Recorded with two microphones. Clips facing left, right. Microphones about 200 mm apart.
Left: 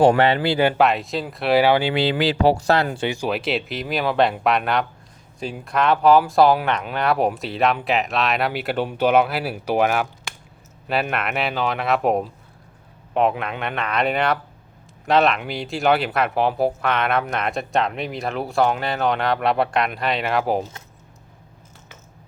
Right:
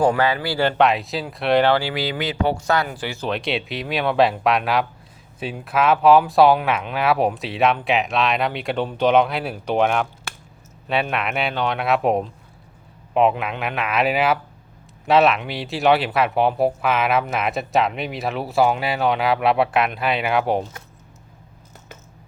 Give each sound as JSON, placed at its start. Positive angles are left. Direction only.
{"t": 0.2, "sound": "speech", "side_deg": 25}
{"t": 0.8, "sound": "speech", "side_deg": 0}
{"t": 1.8, "sound": "speech", "side_deg": 25}
{"t": 3.2, "sound": "speech", "side_deg": 5}
{"t": 11.1, "sound": "speech", "side_deg": 0}